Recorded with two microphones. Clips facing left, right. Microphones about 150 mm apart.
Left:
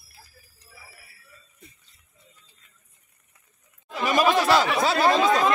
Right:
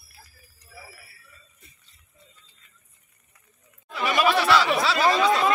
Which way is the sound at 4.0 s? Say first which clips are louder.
Left 1 dB; 40° left (ahead or behind).